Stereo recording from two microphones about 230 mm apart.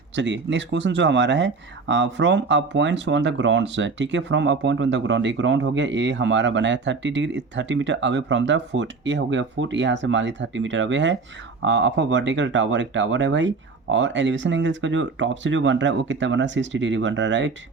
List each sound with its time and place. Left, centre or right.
0.2 s speech: right